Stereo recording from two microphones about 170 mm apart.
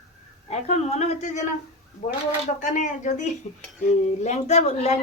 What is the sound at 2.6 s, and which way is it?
A woman's voice, 45° left (ahead or behind).